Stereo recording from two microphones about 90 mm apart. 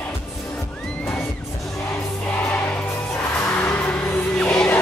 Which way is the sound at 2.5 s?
15° left (ahead or behind).